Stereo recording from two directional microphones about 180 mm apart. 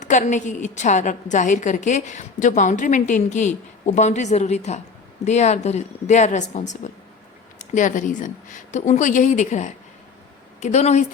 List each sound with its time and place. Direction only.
0.0 s a woman's voice: 45° left (ahead or behind)